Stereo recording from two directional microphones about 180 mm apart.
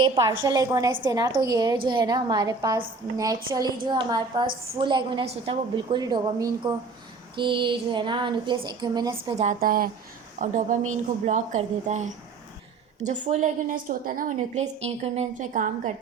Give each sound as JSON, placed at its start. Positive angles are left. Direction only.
{"t": 0.0, "sound": "a woman's voice", "side_deg": -20}
{"t": 9.4, "sound": "a woman's voice", "side_deg": -50}